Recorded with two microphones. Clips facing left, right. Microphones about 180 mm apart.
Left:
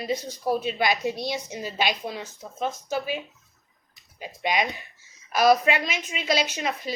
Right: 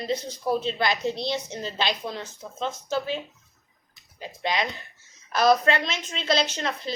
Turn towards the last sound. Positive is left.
turn(degrees=10)  # may be behind; listen again after turning